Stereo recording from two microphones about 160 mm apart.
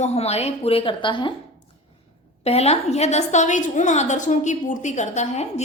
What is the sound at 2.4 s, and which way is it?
A woman's voice, 40° left (ahead or behind).